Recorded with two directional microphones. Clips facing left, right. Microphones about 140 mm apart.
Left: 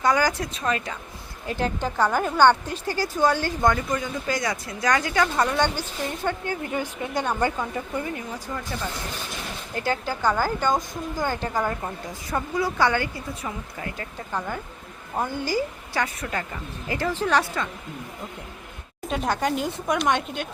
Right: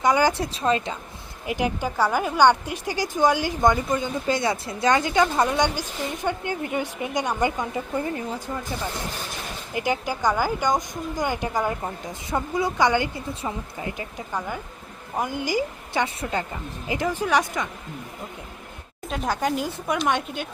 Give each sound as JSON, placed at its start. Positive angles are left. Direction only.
{"t": 0.0, "sound": "speech", "side_deg": -20}
{"t": 1.5, "sound": "a woman's voice", "side_deg": -15}
{"t": 9.7, "sound": "a woman's voice", "side_deg": -15}
{"t": 19.0, "sound": "speech", "side_deg": 0}